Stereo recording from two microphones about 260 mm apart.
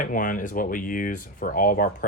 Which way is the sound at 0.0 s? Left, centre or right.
Left.